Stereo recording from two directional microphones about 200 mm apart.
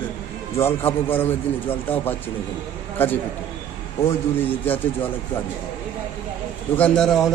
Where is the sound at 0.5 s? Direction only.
10° left (ahead or behind).